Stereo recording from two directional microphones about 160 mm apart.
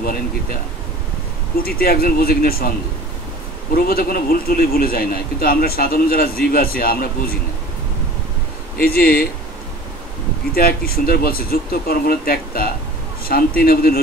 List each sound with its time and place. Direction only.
1.6 s a man's voice: 70° left (ahead or behind)
3.7 s a man's voice: 65° left (ahead or behind)
8.7 s a man's voice: 65° left (ahead or behind)
10.5 s a man's voice: 70° left (ahead or behind)